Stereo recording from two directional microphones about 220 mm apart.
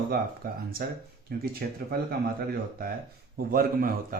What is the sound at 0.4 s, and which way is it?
Speech, 40° right (ahead or behind).